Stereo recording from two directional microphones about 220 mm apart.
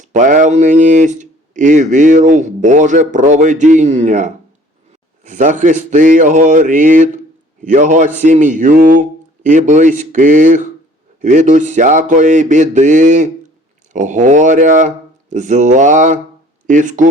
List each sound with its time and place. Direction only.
0.0 s speech: 35° right (ahead or behind)